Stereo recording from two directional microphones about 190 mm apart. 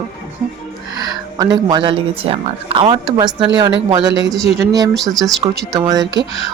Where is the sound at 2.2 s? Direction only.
30° right (ahead or behind).